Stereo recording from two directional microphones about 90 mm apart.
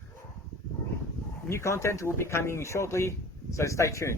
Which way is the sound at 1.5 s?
30° left (ahead or behind).